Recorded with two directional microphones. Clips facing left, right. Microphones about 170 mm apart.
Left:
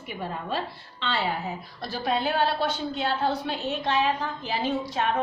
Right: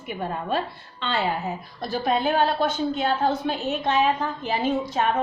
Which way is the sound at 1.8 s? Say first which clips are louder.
Right 4 dB; 50° right (ahead or behind).